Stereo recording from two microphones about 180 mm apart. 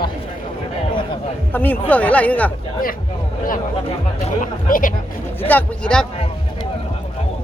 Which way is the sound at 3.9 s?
40° left (ahead or behind).